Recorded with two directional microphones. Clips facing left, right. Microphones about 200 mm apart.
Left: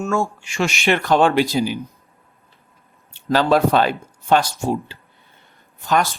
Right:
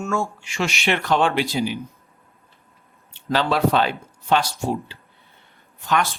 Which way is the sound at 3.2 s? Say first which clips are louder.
Left 4 dB; 45° left (ahead or behind).